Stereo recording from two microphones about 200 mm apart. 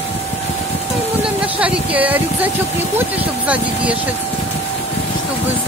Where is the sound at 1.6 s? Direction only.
5° right (ahead or behind).